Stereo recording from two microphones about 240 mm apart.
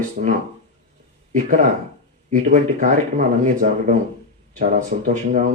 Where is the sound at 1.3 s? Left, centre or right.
Right.